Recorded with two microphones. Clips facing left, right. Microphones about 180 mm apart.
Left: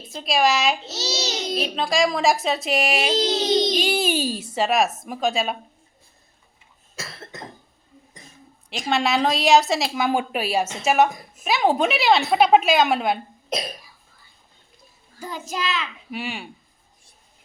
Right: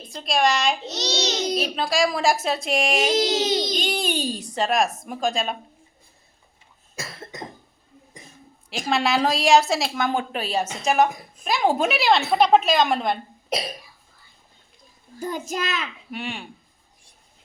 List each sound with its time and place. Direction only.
0.1 s a child's voice: centre (ahead or behind)
6.9 s cough: 15° right (ahead or behind)
8.7 s a child's voice: centre (ahead or behind)
15.3 s a child's voice: 45° right (ahead or behind)
16.1 s a child's voice: 5° left (ahead or behind)